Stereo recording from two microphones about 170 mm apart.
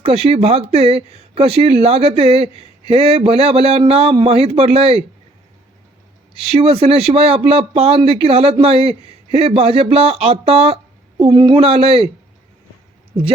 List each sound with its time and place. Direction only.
0.0 s speech: 35° right (ahead or behind)
6.3 s speech: 35° right (ahead or behind)